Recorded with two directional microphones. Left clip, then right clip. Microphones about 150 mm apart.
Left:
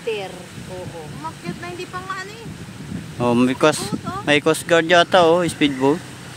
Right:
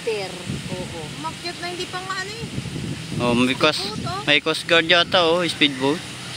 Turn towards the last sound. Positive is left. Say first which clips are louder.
# left 1 dB
turn(degrees=35)  # may be behind; listen again after turning